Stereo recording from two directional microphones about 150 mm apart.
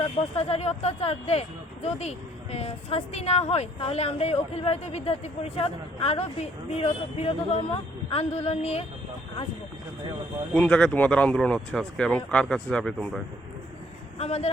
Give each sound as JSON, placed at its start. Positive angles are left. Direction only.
{"t": 0.3, "sound": "speech", "side_deg": 45}
{"t": 10.5, "sound": "speech", "side_deg": 5}
{"t": 14.2, "sound": "speech", "side_deg": 45}